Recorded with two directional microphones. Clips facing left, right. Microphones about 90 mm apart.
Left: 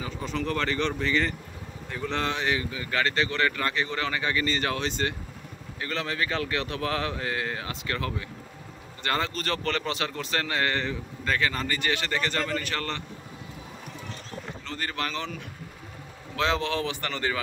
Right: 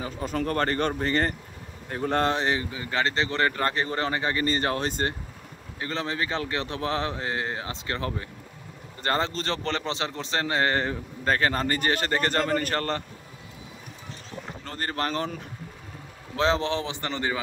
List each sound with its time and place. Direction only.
0.0 s a man's voice: 45° right (ahead or behind)
5.8 s a man's voice: 30° right (ahead or behind)
14.6 s a man's voice: 40° right (ahead or behind); by 17.4 s 20° right (ahead or behind)